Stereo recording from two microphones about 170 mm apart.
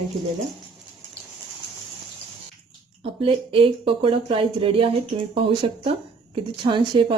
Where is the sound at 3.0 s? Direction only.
35° right (ahead or behind).